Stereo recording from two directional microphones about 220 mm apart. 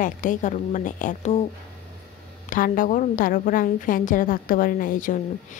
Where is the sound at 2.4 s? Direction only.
40° left (ahead or behind).